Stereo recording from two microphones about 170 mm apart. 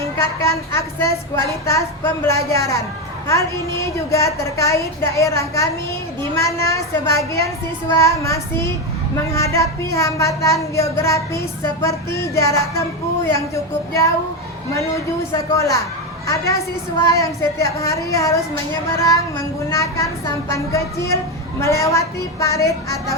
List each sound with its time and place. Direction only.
0.2 s speech: 15° left (ahead or behind)